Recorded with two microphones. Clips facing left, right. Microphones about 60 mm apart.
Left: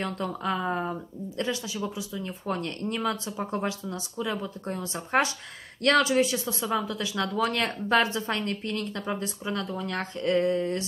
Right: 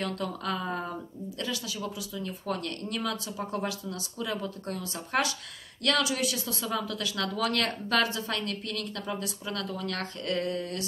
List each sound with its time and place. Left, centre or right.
0.0 s speech: left